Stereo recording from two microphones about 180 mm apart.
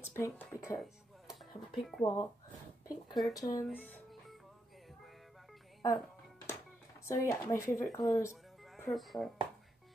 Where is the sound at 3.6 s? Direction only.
5° left (ahead or behind).